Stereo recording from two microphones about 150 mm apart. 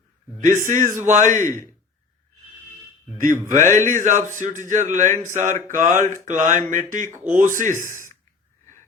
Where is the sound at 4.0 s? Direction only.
55° right (ahead or behind).